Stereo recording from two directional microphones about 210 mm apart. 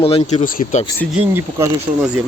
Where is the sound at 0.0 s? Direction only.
30° left (ahead or behind).